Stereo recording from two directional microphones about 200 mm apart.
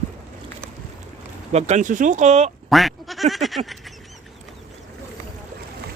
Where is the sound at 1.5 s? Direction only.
35° right (ahead or behind).